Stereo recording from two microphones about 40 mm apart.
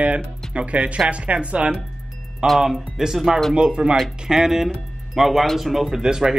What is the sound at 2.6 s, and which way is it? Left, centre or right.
Speech, centre.